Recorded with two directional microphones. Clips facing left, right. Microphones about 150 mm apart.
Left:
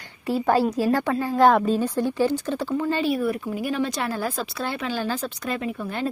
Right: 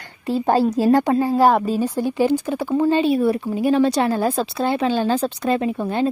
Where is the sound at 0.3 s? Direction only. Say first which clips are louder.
Right 2 dB; 25° right (ahead or behind).